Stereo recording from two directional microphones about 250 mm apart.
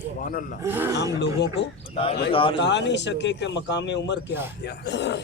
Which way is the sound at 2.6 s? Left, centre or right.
Left.